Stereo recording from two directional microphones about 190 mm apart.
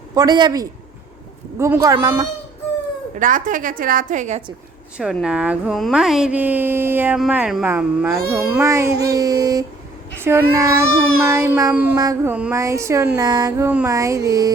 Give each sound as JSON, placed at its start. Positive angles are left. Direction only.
{"t": 0.1, "sound": "a man's voice", "side_deg": -20}
{"t": 3.2, "sound": "a woman's voice", "side_deg": -45}
{"t": 5.2, "sound": "speech", "side_deg": -5}